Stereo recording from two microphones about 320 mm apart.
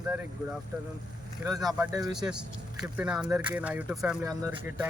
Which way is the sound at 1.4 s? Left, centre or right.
Centre.